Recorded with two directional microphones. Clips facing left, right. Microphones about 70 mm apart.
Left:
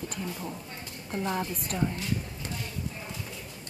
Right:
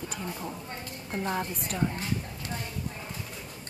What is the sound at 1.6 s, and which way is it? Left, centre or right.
Speech, centre.